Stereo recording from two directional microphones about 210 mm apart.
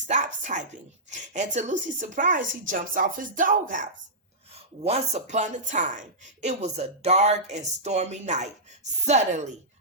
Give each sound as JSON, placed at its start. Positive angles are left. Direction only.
{"t": 0.5, "sound": "speech", "side_deg": -35}